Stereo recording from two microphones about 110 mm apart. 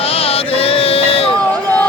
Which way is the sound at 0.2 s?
60° left (ahead or behind).